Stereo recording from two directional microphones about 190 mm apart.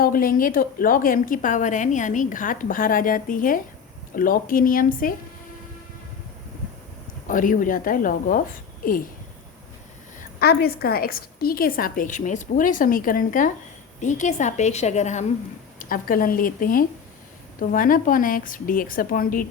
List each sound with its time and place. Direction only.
0.0 s a woman's voice: 50° left (ahead or behind)
7.3 s a woman's voice: 45° left (ahead or behind)
10.2 s a woman's voice: 55° left (ahead or behind)